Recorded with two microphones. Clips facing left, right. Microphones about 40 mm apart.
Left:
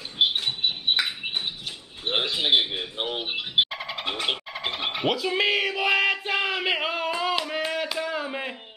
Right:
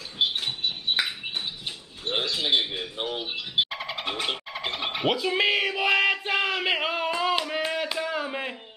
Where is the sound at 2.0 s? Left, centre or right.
Left.